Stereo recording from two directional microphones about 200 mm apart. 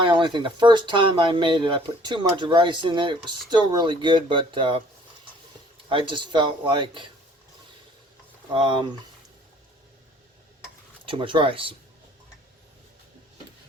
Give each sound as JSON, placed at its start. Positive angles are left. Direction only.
{"t": 0.0, "sound": "speech", "side_deg": -25}
{"t": 5.9, "sound": "speech", "side_deg": -25}
{"t": 8.5, "sound": "speech", "side_deg": -25}
{"t": 11.0, "sound": "speech", "side_deg": -25}